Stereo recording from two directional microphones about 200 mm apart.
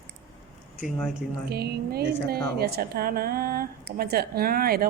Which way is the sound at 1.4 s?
50° right (ahead or behind).